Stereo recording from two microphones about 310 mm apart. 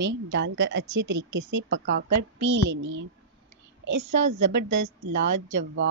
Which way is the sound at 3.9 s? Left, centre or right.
Right.